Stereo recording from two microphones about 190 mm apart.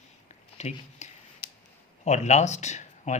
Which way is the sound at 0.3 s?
35° left (ahead or behind).